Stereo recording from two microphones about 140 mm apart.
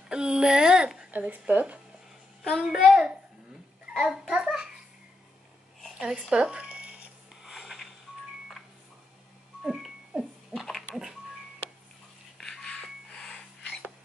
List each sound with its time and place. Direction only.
0.1 s a child's voice: 5° right (ahead or behind)
5.8 s music: centre (ahead or behind)
7.4 s a sound: centre (ahead or behind)
9.7 s music: 5° right (ahead or behind)
12.4 s music: 5° left (ahead or behind)